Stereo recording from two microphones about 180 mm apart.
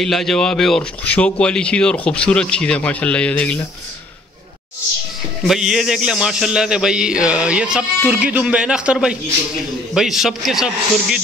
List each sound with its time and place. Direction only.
0.0 s a man's voice: centre (ahead or behind)
5.5 s a man's voice: centre (ahead or behind)